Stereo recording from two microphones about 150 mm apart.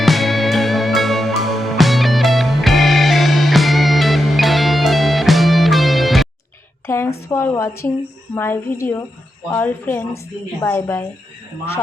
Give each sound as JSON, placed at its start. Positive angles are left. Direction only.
{"t": 0.0, "sound": "music", "side_deg": 0}
{"t": 6.8, "sound": "a sound", "side_deg": 15}
{"t": 7.3, "sound": "a woman's voice", "side_deg": 15}